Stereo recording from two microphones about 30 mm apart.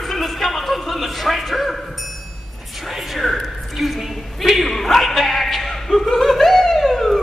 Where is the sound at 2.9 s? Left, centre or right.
Centre.